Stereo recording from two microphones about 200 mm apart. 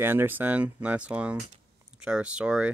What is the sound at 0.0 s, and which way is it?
Speech, 10° right (ahead or behind).